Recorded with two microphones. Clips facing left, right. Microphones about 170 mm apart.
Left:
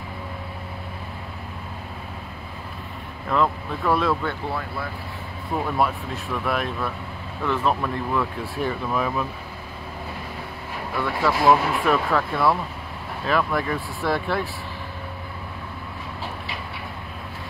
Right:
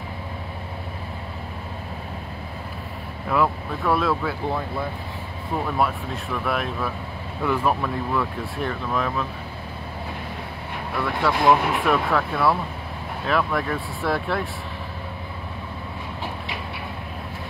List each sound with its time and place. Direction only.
3.3 s speech: 5° right (ahead or behind)
4.5 s speech: 15° right (ahead or behind)
5.8 s speech: centre (ahead or behind)
11.0 s speech: centre (ahead or behind)